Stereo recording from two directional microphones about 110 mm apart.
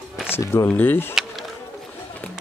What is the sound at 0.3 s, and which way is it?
Speech, 25° left (ahead or behind).